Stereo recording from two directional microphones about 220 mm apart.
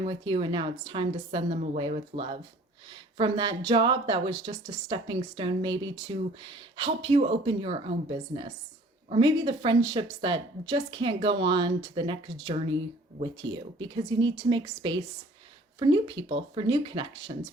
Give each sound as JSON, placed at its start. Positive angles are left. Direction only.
{"t": 0.0, "sound": "a woman's voice", "side_deg": -25}